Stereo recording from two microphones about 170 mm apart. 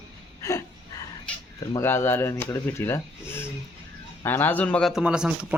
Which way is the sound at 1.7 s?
15° left (ahead or behind).